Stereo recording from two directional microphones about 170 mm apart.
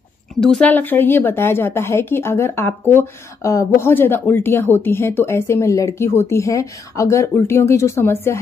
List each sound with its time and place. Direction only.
0.4 s a woman's voice: 5° left (ahead or behind)